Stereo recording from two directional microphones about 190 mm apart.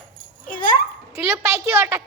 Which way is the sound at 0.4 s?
45° left (ahead or behind).